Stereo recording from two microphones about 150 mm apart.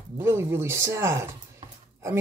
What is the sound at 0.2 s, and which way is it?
Speech, 15° right (ahead or behind).